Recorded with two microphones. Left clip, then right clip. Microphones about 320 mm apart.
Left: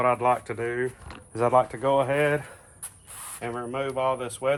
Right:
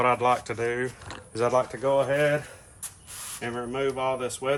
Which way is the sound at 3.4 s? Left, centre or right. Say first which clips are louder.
Right 1 dB; centre.